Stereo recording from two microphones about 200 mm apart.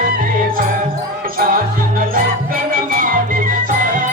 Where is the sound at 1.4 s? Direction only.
45° right (ahead or behind).